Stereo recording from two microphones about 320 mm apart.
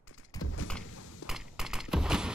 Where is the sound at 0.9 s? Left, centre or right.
Left.